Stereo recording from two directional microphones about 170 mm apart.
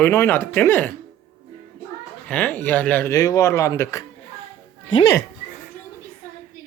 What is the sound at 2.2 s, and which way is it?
Speech, 10° left (ahead or behind).